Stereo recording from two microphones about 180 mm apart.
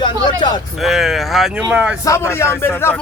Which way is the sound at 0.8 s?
Centre (ahead or behind).